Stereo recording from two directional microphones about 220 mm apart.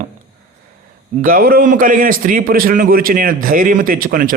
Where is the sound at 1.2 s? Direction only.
40° right (ahead or behind).